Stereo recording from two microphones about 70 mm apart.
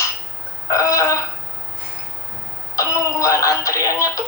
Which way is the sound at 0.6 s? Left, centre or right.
Left.